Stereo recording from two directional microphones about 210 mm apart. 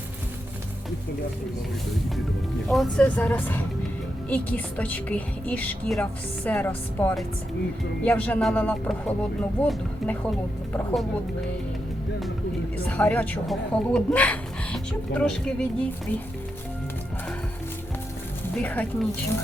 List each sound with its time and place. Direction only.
2.6 s a woman's voice: 5° left (ahead or behind)
12.7 s a woman's voice: 10° left (ahead or behind)
18.5 s a woman's voice: 10° left (ahead or behind)